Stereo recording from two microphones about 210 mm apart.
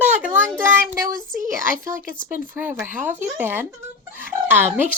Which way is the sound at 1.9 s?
10° right (ahead or behind).